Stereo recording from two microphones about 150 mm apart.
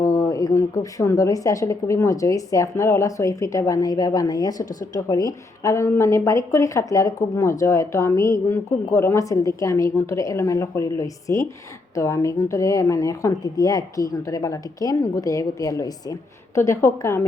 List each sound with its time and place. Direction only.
0.0 s a woman's voice: 20° left (ahead or behind)